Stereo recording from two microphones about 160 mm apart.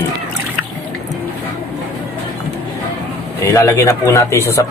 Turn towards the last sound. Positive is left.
turn(degrees=15)  # may be behind; listen again after turning